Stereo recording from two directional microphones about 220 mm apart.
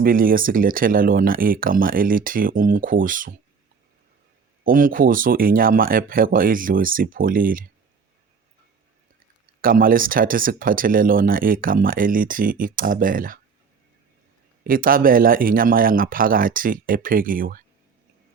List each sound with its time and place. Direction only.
0.0 s speech: 40° right (ahead or behind)
4.6 s speech: 40° right (ahead or behind)
9.6 s speech: 40° right (ahead or behind)
14.6 s speech: 40° right (ahead or behind)